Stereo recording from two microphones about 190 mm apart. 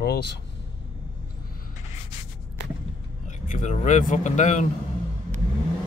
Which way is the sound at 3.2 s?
40° left (ahead or behind).